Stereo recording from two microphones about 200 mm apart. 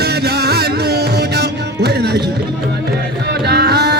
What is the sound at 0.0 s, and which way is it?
Music, 55° right (ahead or behind).